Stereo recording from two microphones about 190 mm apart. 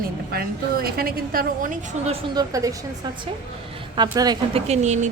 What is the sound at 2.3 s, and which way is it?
A woman's voice, 20° right (ahead or behind).